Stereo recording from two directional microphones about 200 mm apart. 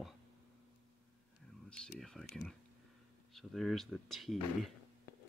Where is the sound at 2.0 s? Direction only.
Centre (ahead or behind).